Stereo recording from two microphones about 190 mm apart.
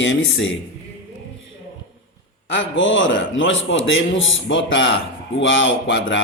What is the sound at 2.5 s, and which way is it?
A man's voice, 80° left.